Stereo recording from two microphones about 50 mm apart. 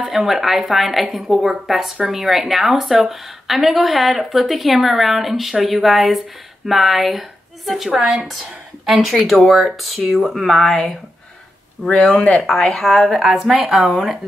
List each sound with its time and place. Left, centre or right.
0.1 s a woman's voice: centre
11.9 s speech: left
12.4 s a woman's voice: centre